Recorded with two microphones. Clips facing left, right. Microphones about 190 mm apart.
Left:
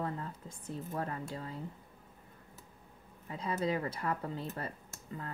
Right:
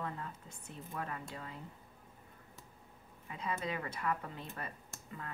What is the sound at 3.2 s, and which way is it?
Speech, 35° left (ahead or behind).